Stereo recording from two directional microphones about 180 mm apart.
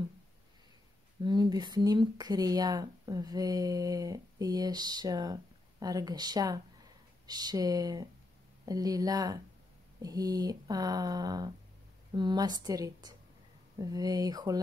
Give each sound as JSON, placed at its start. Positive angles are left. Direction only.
{"t": 1.2, "sound": "speech", "side_deg": -25}